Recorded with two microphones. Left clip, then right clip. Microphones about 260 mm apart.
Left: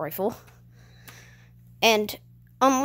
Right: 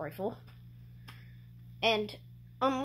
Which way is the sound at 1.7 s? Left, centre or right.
Left.